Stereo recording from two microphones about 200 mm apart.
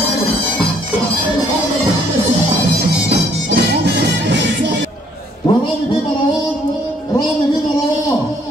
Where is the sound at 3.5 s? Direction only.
60° right (ahead or behind).